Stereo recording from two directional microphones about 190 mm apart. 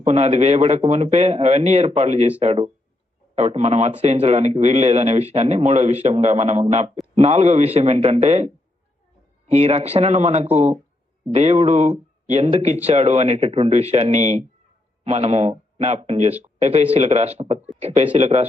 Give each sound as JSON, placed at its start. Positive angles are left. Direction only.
{"t": 0.0, "sound": "speech", "side_deg": -35}